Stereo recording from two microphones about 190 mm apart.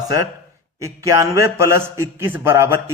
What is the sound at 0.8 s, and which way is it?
A man's voice, 15° right (ahead or behind).